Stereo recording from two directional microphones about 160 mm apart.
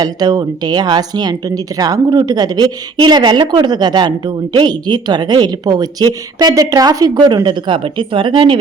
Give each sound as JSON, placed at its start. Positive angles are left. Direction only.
{"t": 0.0, "sound": "speech", "side_deg": -25}